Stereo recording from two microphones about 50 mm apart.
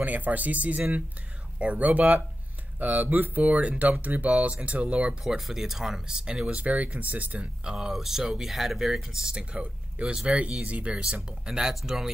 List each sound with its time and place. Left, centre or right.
0.0 s speech: right
5.2 s speech: centre
6.6 s speech: right
7.6 s speech: centre